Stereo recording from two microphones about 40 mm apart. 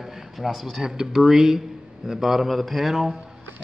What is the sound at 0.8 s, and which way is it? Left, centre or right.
A man's voice, centre.